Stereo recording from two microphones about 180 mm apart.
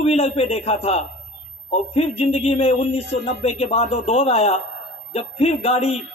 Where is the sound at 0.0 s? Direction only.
35° left (ahead or behind).